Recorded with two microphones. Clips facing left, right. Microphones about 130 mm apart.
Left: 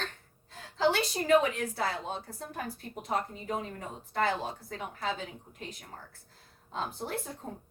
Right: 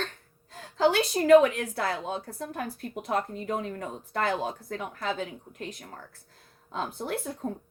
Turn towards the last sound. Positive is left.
turn(degrees=-55)  # may be behind; listen again after turning